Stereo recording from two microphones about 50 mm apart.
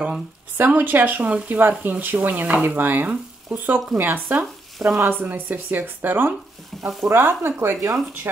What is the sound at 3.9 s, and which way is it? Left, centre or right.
Frying, right.